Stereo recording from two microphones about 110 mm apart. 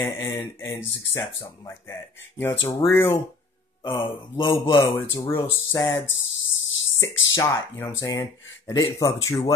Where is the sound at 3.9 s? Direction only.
45° left (ahead or behind).